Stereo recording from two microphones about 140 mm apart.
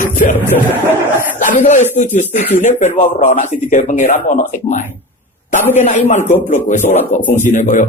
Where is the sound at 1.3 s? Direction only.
60° left (ahead or behind).